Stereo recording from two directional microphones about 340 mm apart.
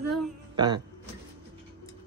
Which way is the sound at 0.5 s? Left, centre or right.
Centre.